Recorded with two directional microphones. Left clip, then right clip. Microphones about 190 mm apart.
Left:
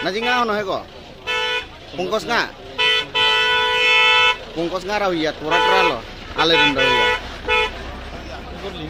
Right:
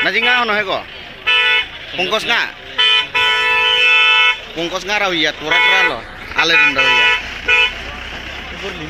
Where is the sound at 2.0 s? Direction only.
10° left (ahead or behind).